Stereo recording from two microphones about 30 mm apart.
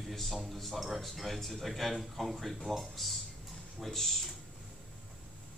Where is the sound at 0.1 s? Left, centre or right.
Centre.